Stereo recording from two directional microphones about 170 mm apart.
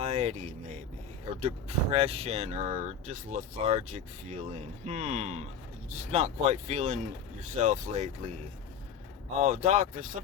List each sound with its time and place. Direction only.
0.0 s a sound: 40° right (ahead or behind)
1.4 s speech: 35° right (ahead or behind)
9.4 s speech: 45° right (ahead or behind)